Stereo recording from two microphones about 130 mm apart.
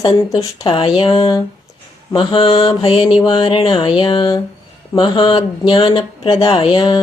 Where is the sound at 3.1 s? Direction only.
40° left (ahead or behind).